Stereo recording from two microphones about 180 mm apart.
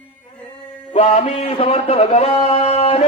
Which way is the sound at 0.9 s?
35° left (ahead or behind).